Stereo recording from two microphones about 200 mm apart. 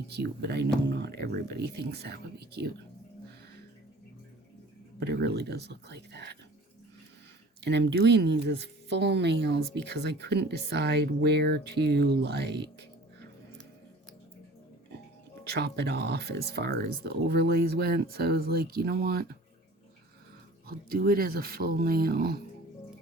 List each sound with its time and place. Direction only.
0.1 s speech: 55° right (ahead or behind)
4.9 s speech: 55° right (ahead or behind)
7.6 s speech: 60° right (ahead or behind)
15.4 s speech: 55° right (ahead or behind)
20.7 s speech: 50° right (ahead or behind)